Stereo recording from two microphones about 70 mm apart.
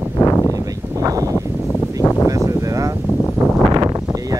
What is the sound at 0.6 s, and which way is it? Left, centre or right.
Speech, right.